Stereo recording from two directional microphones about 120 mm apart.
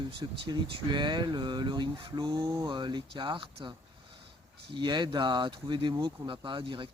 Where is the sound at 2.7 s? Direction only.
40° right (ahead or behind).